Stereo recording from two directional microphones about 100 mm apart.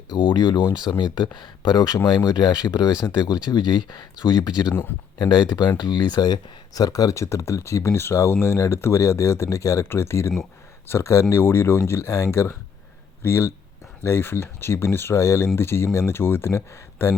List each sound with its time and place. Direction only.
0.1 s speech: 45° left (ahead or behind)
4.7 s speech: 20° left (ahead or behind)
5.2 s speech: 50° left (ahead or behind); by 17.2 s 30° left (ahead or behind)